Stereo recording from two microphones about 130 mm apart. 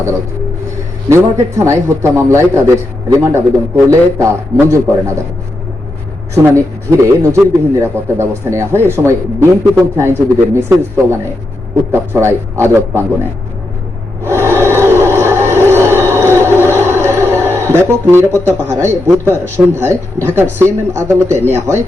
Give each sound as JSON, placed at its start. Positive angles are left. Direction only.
{"t": 1.1, "sound": "speech", "side_deg": -20}
{"t": 6.3, "sound": "speech", "side_deg": -20}
{"t": 14.3, "sound": "a sound", "side_deg": -20}
{"t": 20.2, "sound": "speech", "side_deg": -15}